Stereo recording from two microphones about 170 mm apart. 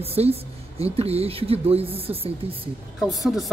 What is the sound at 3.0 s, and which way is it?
Speech, centre (ahead or behind).